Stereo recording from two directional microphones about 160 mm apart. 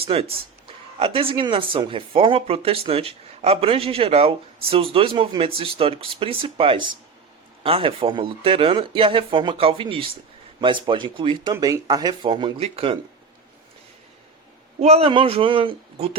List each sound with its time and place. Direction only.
0.0 s speech: 40° right (ahead or behind)
11.5 s speech: 20° right (ahead or behind); by 13.0 s 35° right (ahead or behind)
14.8 s speech: 40° right (ahead or behind)